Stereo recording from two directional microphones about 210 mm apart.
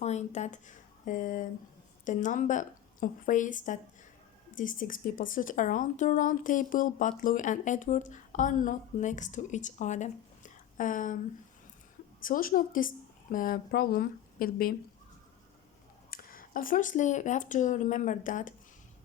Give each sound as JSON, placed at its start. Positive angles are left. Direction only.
{"t": 0.0, "sound": "a woman's voice", "side_deg": 35}
{"t": 12.2, "sound": "a woman's voice", "side_deg": 40}
{"t": 16.0, "sound": "speech", "side_deg": 45}